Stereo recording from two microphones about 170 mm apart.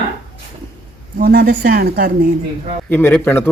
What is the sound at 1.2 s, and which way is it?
Speech, 65° right (ahead or behind).